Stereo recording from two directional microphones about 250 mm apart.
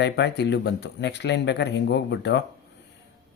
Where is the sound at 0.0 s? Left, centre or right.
Left.